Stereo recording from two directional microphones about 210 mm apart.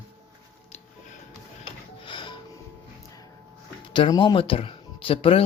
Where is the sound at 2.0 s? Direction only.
25° left (ahead or behind).